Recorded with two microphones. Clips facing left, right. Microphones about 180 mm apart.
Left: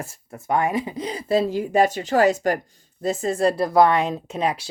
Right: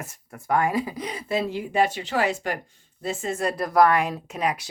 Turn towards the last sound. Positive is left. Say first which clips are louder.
# left 3 dB
turn(degrees=30)  # may be behind; listen again after turning